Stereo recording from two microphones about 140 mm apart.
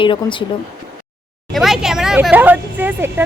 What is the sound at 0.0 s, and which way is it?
Speech, 35° left (ahead or behind).